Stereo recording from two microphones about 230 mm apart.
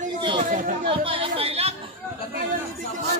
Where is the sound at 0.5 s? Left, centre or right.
Right.